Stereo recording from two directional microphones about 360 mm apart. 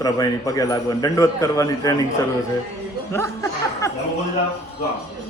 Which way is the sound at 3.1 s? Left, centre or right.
Centre.